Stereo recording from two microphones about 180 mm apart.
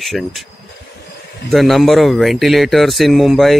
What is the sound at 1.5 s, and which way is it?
Speech, centre (ahead or behind).